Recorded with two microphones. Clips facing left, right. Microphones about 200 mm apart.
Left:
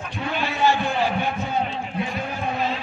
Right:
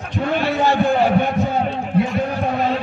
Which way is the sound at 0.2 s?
60° right (ahead or behind).